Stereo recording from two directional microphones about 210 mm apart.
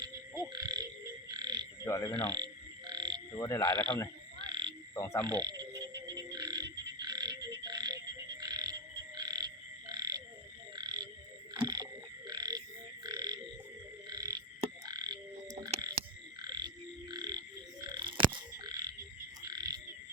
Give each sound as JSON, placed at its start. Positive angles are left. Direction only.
{"t": 0.5, "sound": "frog", "side_deg": -20}
{"t": 1.8, "sound": "speech", "side_deg": 15}
{"t": 2.3, "sound": "frog", "side_deg": -20}
{"t": 3.4, "sound": "speech", "side_deg": 15}
{"t": 4.4, "sound": "frog", "side_deg": -20}
{"t": 4.9, "sound": "speech", "side_deg": 10}
{"t": 5.2, "sound": "frog", "side_deg": -20}
{"t": 5.8, "sound": "music", "side_deg": -55}
{"t": 6.3, "sound": "frog", "side_deg": -20}
{"t": 11.6, "sound": "a sound", "side_deg": -20}
{"t": 12.3, "sound": "frog", "side_deg": -20}